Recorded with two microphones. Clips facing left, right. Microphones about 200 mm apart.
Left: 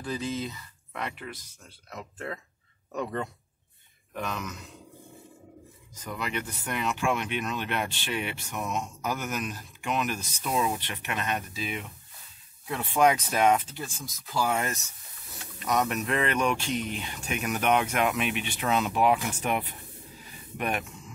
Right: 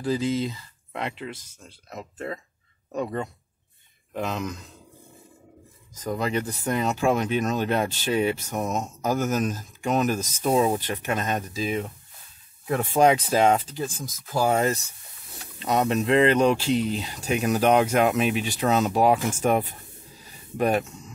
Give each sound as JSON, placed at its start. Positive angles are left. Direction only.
{"t": 0.4, "sound": "speech", "side_deg": -25}
{"t": 5.9, "sound": "speech", "side_deg": -40}
{"t": 13.0, "sound": "speech", "side_deg": -30}
{"t": 13.7, "sound": "speech", "side_deg": -45}